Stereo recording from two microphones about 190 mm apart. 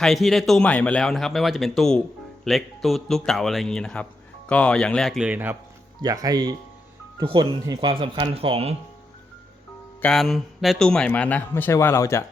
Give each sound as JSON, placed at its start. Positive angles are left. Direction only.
{"t": 0.0, "sound": "a man's voice", "side_deg": 0}
{"t": 10.0, "sound": "speech", "side_deg": 0}